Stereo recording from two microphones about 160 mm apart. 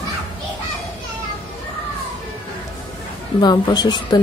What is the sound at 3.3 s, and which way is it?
Speech, 25° left (ahead or behind).